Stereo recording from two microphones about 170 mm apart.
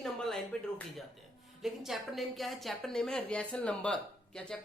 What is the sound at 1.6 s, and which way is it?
Speech, centre (ahead or behind).